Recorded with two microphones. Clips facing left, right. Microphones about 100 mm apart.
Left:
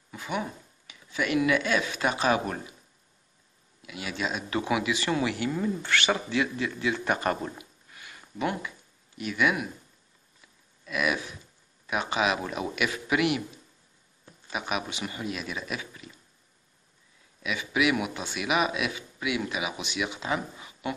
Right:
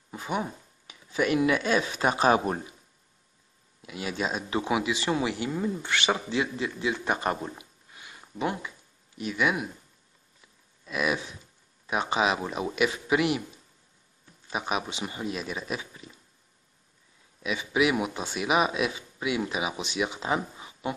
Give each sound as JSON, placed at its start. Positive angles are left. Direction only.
{"t": 0.1, "sound": "speech", "side_deg": -30}
{"t": 3.8, "sound": "speech", "side_deg": -35}
{"t": 4.5, "sound": "speech", "side_deg": -20}
{"t": 10.9, "sound": "speech", "side_deg": -30}
{"t": 14.5, "sound": "speech", "side_deg": -30}
{"t": 17.4, "sound": "speech", "side_deg": -35}